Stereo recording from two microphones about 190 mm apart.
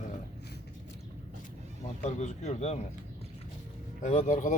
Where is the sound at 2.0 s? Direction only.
40° left (ahead or behind).